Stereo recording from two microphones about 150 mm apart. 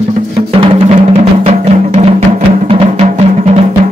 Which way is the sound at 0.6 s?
40° right (ahead or behind).